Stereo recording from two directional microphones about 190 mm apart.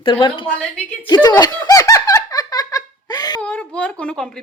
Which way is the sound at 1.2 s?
20° left (ahead or behind).